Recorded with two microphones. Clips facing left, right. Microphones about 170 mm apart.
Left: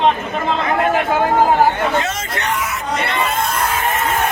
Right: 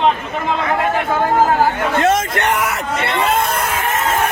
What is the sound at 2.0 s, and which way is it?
Speech, 55° right (ahead or behind).